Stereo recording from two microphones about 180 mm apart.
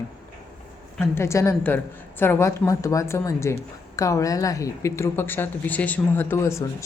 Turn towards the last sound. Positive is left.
turn(degrees=15)  # may be behind; listen again after turning